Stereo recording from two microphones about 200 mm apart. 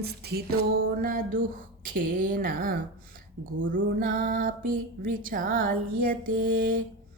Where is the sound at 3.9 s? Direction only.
45° right (ahead or behind).